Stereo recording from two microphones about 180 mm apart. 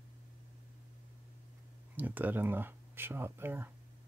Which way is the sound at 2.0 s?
10° right (ahead or behind).